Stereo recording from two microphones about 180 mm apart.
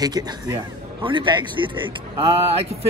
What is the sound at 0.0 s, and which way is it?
A man's voice, 25° right (ahead or behind).